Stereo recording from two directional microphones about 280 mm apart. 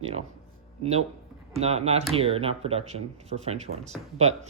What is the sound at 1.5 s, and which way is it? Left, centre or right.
Speech, right.